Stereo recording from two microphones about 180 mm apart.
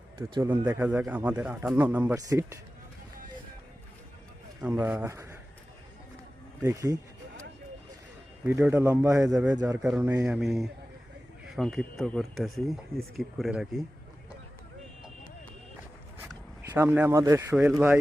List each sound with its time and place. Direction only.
0.5 s speech: 20° right (ahead or behind)
0.8 s speech: 10° right (ahead or behind)
4.6 s speech: 10° right (ahead or behind)
6.6 s speech: 15° right (ahead or behind)
8.4 s speech: 10° right (ahead or behind)
16.3 s speech: 15° right (ahead or behind)